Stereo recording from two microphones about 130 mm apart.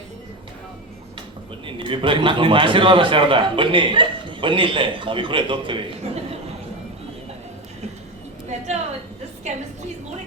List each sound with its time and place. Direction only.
1.6 s a man's voice: 40° right (ahead or behind)
8.4 s a woman's voice: 60° right (ahead or behind)